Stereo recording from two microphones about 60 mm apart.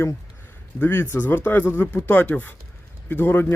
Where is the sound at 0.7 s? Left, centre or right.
Left.